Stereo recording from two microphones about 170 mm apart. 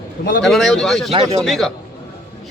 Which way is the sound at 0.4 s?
Centre (ahead or behind).